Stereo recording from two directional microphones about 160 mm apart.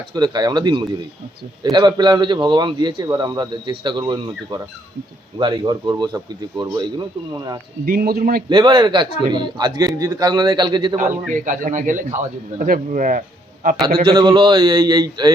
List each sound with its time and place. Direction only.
0.1 s speech: 25° right (ahead or behind)
7.9 s a man's voice: 65° right (ahead or behind)
8.4 s speech: 30° right (ahead or behind)
11.3 s a man's voice: 55° right (ahead or behind)
14.0 s speech: 30° right (ahead or behind)